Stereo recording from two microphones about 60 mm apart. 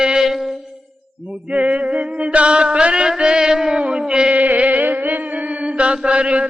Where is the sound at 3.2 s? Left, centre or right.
Centre.